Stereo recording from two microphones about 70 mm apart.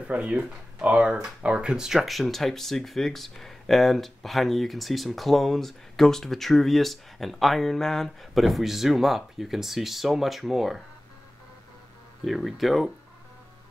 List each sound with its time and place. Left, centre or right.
0.1 s speech: centre
12.3 s speech: centre